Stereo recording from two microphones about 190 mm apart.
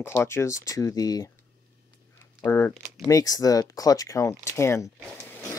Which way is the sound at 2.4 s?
15° left (ahead or behind).